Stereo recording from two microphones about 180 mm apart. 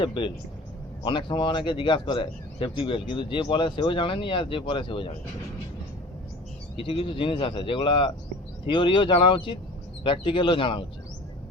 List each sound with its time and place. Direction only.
0.0 s speech: 25° left (ahead or behind)
6.7 s speech: 30° left (ahead or behind)